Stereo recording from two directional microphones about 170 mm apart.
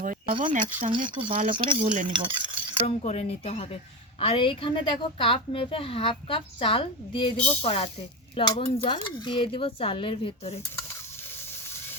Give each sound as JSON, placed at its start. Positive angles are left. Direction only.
{"t": 0.0, "sound": "a sound", "side_deg": -50}
{"t": 0.4, "sound": "speech", "side_deg": -50}
{"t": 0.9, "sound": "speech", "side_deg": -30}
{"t": 2.8, "sound": "speech", "side_deg": 40}